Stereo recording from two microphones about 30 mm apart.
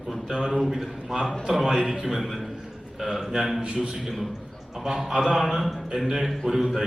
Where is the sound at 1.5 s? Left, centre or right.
Right.